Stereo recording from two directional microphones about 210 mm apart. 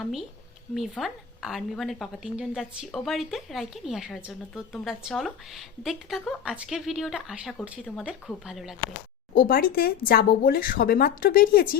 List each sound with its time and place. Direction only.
0.0 s a woman's voice: centre (ahead or behind)
9.3 s speech: 45° left (ahead or behind)